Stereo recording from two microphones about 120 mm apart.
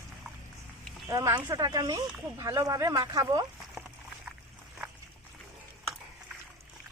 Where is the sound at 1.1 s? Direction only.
30° right (ahead or behind).